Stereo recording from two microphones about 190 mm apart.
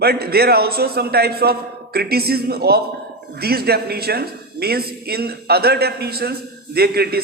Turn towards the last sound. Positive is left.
turn(degrees=-55)  # may be behind; listen again after turning